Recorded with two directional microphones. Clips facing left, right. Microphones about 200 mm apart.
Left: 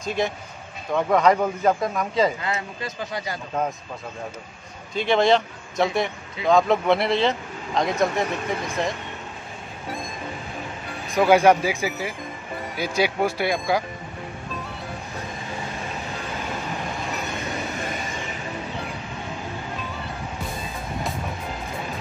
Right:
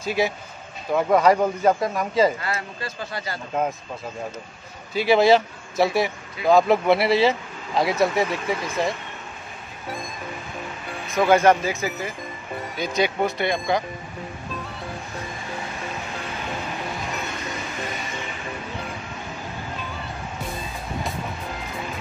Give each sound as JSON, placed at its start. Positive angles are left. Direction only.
{"t": 0.0, "sound": "speech", "side_deg": -5}
{"t": 2.4, "sound": "speech", "side_deg": 20}
{"t": 4.9, "sound": "speech", "side_deg": -5}
{"t": 11.1, "sound": "speech", "side_deg": 10}